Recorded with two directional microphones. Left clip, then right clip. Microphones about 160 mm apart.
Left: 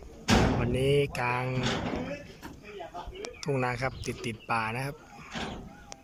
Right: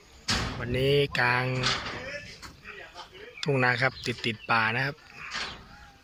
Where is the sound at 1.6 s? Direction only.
50° left (ahead or behind).